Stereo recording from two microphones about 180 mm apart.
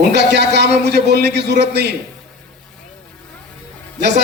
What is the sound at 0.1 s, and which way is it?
Speech, 65° right (ahead or behind).